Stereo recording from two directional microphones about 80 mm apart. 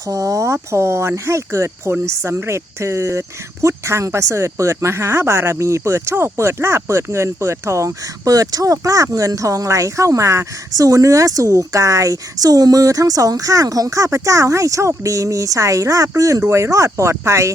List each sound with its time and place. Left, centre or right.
0.1 s a woman's voice: right